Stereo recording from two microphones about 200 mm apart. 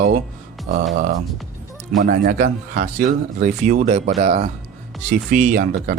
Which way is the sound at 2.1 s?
45° right (ahead or behind).